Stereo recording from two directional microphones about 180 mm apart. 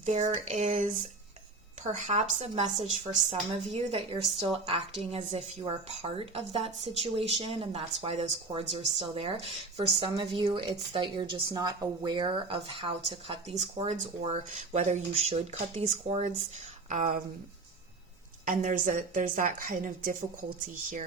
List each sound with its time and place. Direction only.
0.0 s a woman's voice: 40° right (ahead or behind)
18.4 s a woman's voice: 45° right (ahead or behind)